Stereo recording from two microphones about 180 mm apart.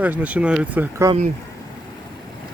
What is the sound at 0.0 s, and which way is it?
Speech, 10° right (ahead or behind).